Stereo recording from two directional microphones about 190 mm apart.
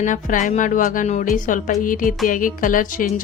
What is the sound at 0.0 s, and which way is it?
Speech, 45° left (ahead or behind).